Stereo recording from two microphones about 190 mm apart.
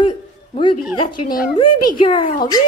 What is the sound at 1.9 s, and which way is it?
Speech, 25° left (ahead or behind).